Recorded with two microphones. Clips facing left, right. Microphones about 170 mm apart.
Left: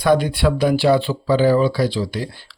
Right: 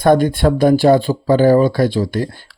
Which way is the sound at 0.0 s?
50° right (ahead or behind).